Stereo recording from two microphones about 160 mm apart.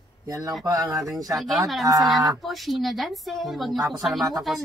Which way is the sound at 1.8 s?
25° right (ahead or behind).